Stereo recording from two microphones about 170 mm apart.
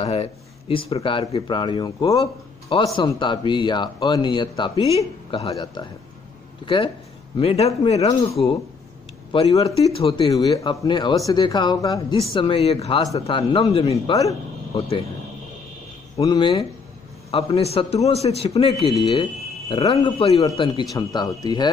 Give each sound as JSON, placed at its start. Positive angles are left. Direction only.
{"t": 0.0, "sound": "speech", "side_deg": 35}
{"t": 5.5, "sound": "speech", "side_deg": 25}
{"t": 13.0, "sound": "speech", "side_deg": 20}
{"t": 13.4, "sound": "speech", "side_deg": 35}
{"t": 14.1, "sound": "a sound", "side_deg": 20}
{"t": 16.2, "sound": "speech", "side_deg": 25}